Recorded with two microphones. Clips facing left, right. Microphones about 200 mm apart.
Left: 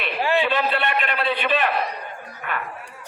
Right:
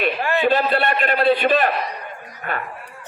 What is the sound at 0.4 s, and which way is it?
A man's voice, 40° right (ahead or behind).